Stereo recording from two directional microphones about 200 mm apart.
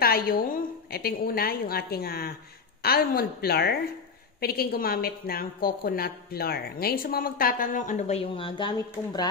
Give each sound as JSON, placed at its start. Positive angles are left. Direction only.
{"t": 0.0, "sound": "a woman's voice", "side_deg": 50}